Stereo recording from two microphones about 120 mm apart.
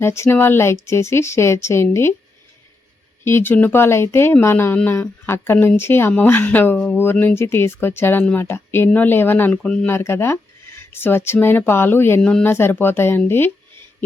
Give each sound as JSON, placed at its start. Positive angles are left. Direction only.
{"t": 0.0, "sound": "speech", "side_deg": 20}
{"t": 3.2, "sound": "speech", "side_deg": 20}
{"t": 9.9, "sound": "speech", "side_deg": 20}